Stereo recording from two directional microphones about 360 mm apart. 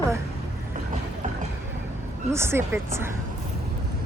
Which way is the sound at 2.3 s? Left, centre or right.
Centre.